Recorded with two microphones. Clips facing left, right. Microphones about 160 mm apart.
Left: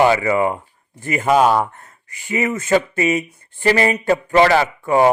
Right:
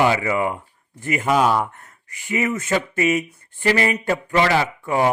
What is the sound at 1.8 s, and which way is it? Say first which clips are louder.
Speech: left 2 dB; 30° left (ahead or behind).